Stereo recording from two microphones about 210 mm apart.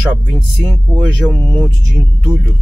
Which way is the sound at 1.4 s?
20° right (ahead or behind).